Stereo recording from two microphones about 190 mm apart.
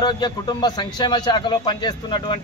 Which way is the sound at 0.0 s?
20° left (ahead or behind).